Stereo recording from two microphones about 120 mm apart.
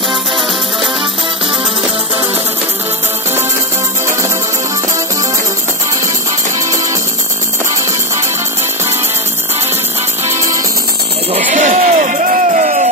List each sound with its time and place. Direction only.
10.2 s music: 25° right (ahead or behind)
11.3 s music: 85° right